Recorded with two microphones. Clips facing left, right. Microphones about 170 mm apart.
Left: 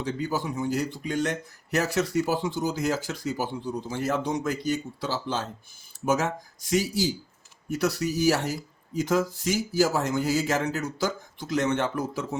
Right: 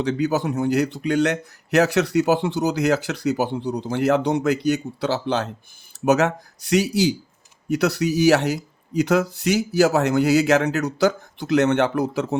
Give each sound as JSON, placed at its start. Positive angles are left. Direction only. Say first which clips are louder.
{"t": 0.0, "sound": "speech", "louder": "right 8 dB", "side_deg": -75}